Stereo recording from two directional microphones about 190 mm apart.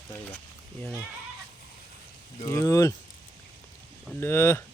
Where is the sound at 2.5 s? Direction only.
15° left (ahead or behind).